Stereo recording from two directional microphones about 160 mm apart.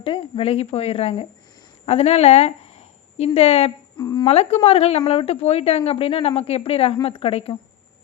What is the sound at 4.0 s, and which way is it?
Speech, 25° left (ahead or behind).